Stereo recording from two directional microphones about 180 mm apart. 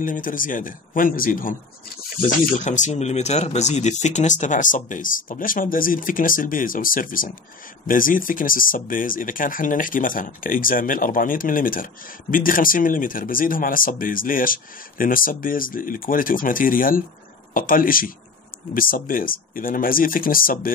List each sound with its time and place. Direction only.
0.0 s speech: 50° left (ahead or behind)
2.6 s speech: 40° left (ahead or behind)